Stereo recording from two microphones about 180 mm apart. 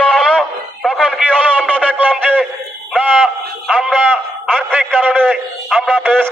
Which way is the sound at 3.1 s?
5° left (ahead or behind).